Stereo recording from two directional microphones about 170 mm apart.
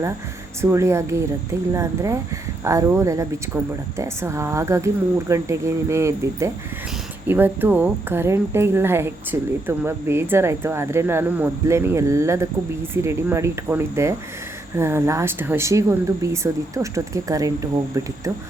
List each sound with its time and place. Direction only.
0.6 s a woman's voice: 15° right (ahead or behind)